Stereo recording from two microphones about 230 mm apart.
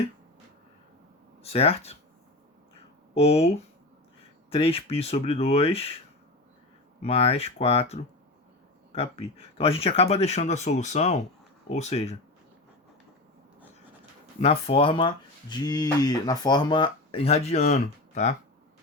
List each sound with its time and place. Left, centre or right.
1.4 s speech: left
3.2 s speech: left
7.0 s speech: left
14.4 s speech: left